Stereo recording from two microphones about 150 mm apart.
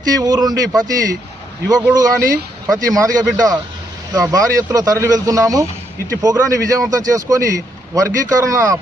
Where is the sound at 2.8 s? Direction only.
25° right (ahead or behind).